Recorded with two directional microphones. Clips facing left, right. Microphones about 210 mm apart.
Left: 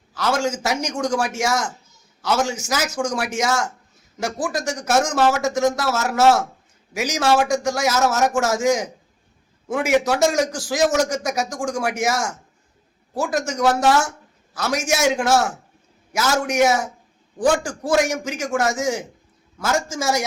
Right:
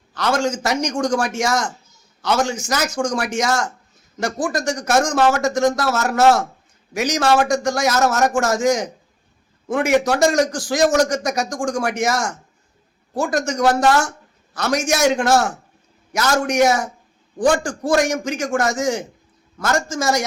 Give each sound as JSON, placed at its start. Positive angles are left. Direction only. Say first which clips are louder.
{"t": 0.1, "sound": "a man's voice", "louder": "right 2 dB", "side_deg": 5}